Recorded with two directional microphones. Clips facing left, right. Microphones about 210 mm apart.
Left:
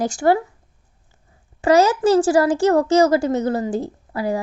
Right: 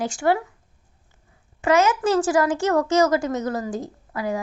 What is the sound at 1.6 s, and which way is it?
Speech, 35° left (ahead or behind).